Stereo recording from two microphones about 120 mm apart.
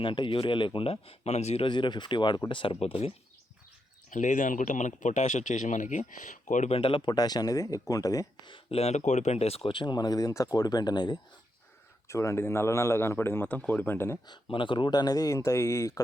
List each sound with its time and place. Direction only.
0.0 s speech: 45° left (ahead or behind); by 1.6 s 65° left (ahead or behind)
1.6 s speech: 40° left (ahead or behind); by 3.1 s 55° left (ahead or behind)
4.1 s speech: 90° left
6.7 s speech: 45° left (ahead or behind); by 8.3 s 30° left (ahead or behind)
8.4 s speech: 50° left (ahead or behind)
12.0 s a man's voice: 25° left (ahead or behind)
14.3 s speech: 45° left (ahead or behind); by 16.0 s 25° left (ahead or behind)